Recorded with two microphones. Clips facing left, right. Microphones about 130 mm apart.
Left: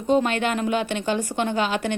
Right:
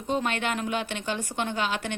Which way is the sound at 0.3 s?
5° left (ahead or behind).